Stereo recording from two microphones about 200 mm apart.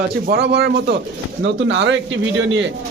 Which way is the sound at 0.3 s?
55° right (ahead or behind).